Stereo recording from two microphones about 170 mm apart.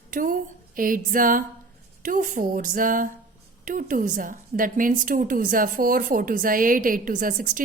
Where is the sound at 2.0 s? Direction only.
50° right (ahead or behind).